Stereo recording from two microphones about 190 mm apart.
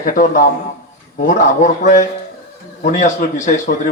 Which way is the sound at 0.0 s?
40° left (ahead or behind).